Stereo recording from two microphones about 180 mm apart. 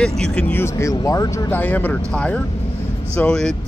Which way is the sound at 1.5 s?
10° left (ahead or behind).